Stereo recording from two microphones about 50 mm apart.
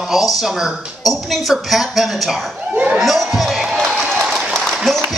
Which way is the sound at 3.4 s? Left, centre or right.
Centre.